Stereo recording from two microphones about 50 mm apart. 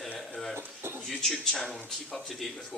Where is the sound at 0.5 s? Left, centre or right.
Right.